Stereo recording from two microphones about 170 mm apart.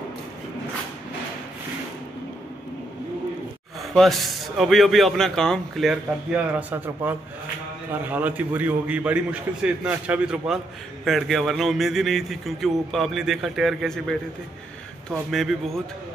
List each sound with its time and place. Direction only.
3.9 s a man's voice: centre (ahead or behind)